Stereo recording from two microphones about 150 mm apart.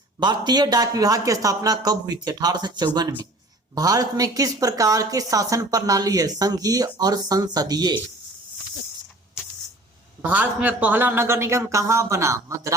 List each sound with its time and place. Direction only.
0.2 s speech: 30° right (ahead or behind)
10.2 s speech: 10° right (ahead or behind)